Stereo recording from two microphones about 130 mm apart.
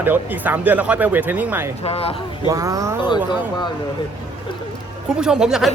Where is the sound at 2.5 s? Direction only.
25° right (ahead or behind).